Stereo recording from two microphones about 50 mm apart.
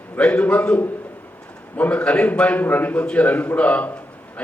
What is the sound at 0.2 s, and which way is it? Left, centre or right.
A man's voice, left.